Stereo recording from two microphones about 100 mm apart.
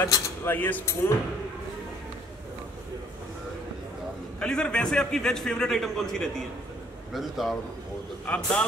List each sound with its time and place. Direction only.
0.5 s speech: 15° left (ahead or behind)
4.4 s a man's voice: 10° left (ahead or behind)
8.3 s a man's voice: 10° left (ahead or behind)